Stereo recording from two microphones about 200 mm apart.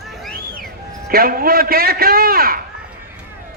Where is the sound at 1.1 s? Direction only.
50° right (ahead or behind).